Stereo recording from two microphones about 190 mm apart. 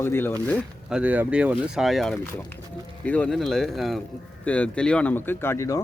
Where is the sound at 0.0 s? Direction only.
10° left (ahead or behind).